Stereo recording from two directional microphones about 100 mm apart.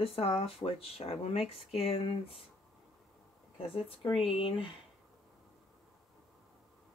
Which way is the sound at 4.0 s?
60° left (ahead or behind).